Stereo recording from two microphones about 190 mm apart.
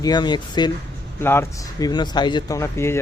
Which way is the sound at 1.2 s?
10° left (ahead or behind).